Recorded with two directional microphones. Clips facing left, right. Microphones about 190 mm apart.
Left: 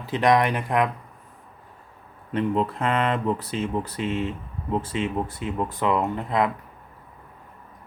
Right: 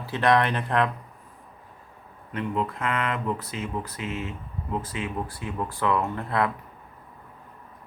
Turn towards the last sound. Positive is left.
turn(degrees=15)  # may be behind; listen again after turning